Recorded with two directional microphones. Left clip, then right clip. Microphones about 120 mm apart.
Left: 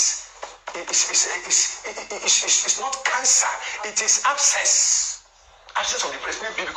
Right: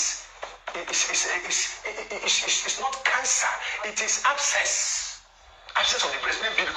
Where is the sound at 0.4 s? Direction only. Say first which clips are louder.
Even; 40° left (ahead or behind).